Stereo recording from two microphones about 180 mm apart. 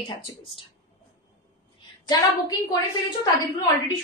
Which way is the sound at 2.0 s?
20° left (ahead or behind).